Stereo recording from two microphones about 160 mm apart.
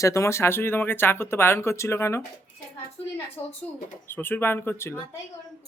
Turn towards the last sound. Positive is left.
turn(degrees=15)  # may be behind; listen again after turning